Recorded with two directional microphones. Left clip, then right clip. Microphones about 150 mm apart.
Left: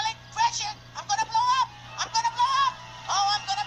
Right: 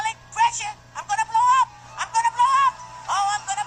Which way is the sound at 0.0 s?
10° right (ahead or behind).